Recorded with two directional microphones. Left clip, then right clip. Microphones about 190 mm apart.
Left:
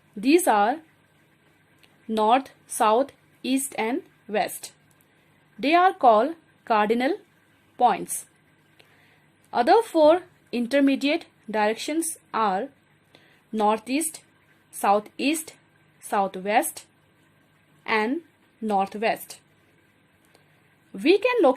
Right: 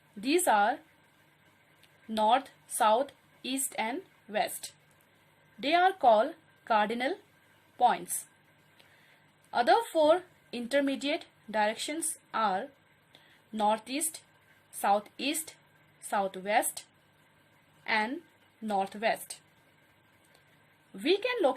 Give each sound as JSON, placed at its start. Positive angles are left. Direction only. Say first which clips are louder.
{"t": 0.2, "sound": "a woman's voice", "louder": "left 6 dB", "side_deg": 15}
{"t": 1.8, "sound": "a woman's voice", "louder": "left 5 dB", "side_deg": 15}
{"t": 9.5, "sound": "a woman's voice", "louder": "left 6 dB", "side_deg": 15}
{"t": 17.8, "sound": "a woman's voice", "louder": "left 6 dB", "side_deg": 15}
{"t": 20.9, "sound": "a woman's voice", "louder": "left 9 dB", "side_deg": 15}